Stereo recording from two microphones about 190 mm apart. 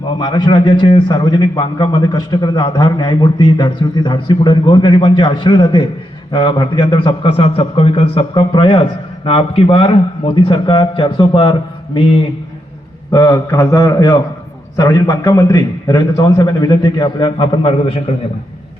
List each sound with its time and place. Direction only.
0.2 s a man's voice: 25° left (ahead or behind)
13.1 s a man's voice: 20° left (ahead or behind)